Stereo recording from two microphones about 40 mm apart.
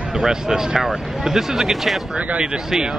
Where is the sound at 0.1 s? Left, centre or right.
Centre.